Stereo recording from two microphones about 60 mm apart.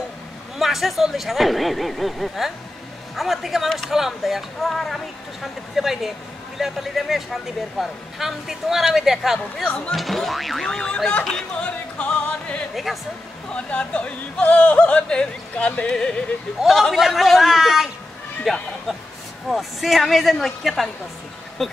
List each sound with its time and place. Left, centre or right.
0.6 s speech: centre
9.7 s speech: centre
12.0 s music: left
12.7 s speech: centre
13.5 s speech: centre
16.6 s speech: centre